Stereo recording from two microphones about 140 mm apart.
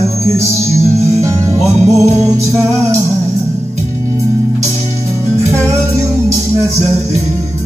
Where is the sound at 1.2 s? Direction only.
20° right (ahead or behind).